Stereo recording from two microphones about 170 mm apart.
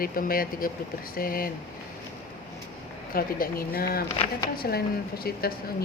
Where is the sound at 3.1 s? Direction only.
60° left (ahead or behind).